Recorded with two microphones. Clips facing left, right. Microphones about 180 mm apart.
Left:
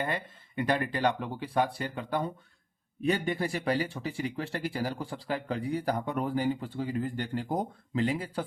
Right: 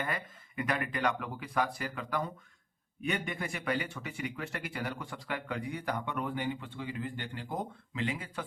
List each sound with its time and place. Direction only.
0.0 s speech: 30° left (ahead or behind)